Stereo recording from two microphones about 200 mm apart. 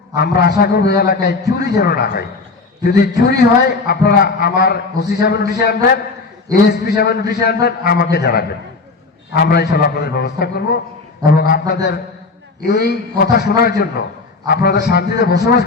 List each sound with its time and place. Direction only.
0.2 s a man's voice: 50° left (ahead or behind)